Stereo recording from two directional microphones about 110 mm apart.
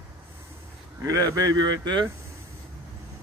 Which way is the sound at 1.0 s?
35° right (ahead or behind).